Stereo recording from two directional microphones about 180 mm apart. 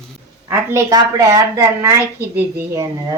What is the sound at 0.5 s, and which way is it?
A woman's voice, 15° right (ahead or behind).